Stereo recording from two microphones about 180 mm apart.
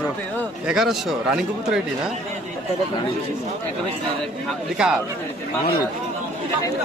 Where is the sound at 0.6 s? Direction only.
Centre (ahead or behind).